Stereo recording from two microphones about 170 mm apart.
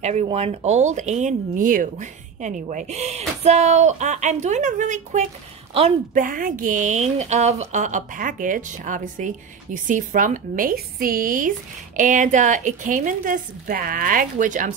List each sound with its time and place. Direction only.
0.0 s speech: 40° right (ahead or behind)